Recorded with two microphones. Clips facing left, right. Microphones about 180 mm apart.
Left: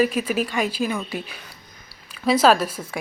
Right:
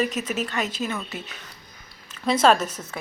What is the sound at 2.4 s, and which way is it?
Speech, 5° left (ahead or behind).